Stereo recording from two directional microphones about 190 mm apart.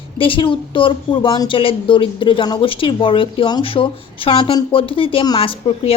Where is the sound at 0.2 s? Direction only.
25° left (ahead or behind).